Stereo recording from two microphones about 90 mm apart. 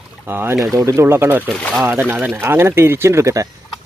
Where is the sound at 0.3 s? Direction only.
25° right (ahead or behind).